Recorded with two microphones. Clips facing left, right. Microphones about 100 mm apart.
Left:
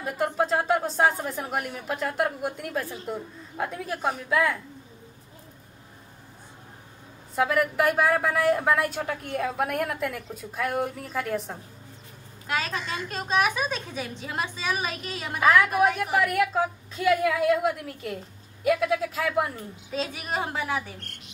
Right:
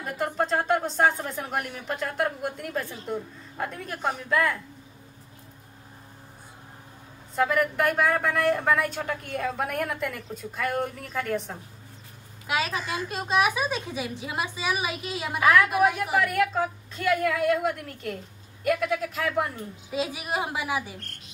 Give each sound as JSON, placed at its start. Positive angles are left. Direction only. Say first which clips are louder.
{"t": 0.0, "sound": "a woman's voice", "louder": "left 2 dB", "side_deg": 5}
{"t": 7.3, "sound": "a woman's voice", "louder": "even", "side_deg": 5}
{"t": 12.4, "sound": "a woman's voice", "louder": "right 1 dB", "side_deg": -10}
{"t": 19.9, "sound": "a woman's voice", "louder": "right 1 dB", "side_deg": -10}